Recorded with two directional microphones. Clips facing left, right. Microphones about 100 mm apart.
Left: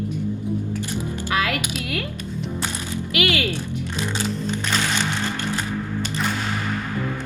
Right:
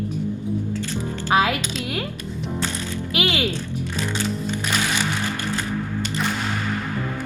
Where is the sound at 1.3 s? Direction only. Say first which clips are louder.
Right 5 dB; 20° right (ahead or behind).